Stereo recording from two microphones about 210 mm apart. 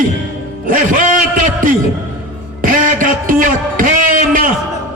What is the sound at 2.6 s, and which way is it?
A man's voice, 40° right (ahead or behind).